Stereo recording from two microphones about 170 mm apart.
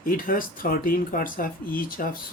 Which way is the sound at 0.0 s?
55° left (ahead or behind).